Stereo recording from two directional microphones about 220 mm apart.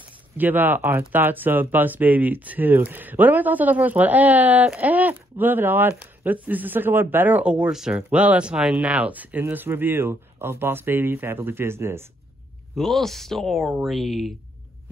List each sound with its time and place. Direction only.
0.4 s speech: 10° right (ahead or behind)
12.7 s speech: centre (ahead or behind)